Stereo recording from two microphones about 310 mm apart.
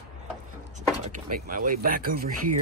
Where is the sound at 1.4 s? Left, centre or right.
Right.